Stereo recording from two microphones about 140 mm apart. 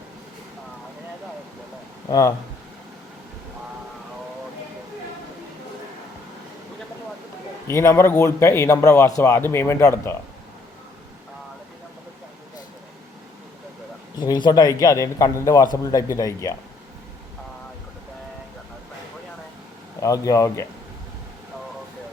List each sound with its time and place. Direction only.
2.0 s a man's voice: 20° left (ahead or behind)
7.7 s a man's voice: 20° left (ahead or behind)
14.2 s a man's voice: 30° left (ahead or behind)
20.0 s a man's voice: 25° left (ahead or behind)